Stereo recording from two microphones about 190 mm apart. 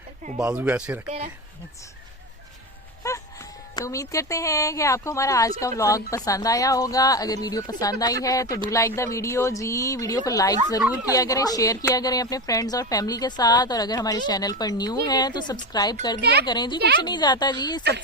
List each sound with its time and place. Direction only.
0.3 s speech: 5° right (ahead or behind)
3.0 s a sound: 15° left (ahead or behind)
3.8 s speech: 15° left (ahead or behind)
16.2 s speech: 60° right (ahead or behind)
16.5 s speech: 20° left (ahead or behind)